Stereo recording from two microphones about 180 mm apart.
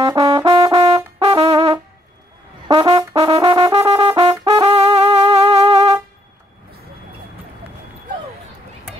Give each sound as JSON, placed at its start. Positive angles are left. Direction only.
{"t": 0.0, "sound": "brass instrument", "side_deg": -20}
{"t": 1.2, "sound": "brass instrument", "side_deg": -30}
{"t": 1.5, "sound": "brass instrument", "side_deg": -20}